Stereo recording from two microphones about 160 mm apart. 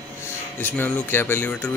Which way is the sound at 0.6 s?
10° left (ahead or behind).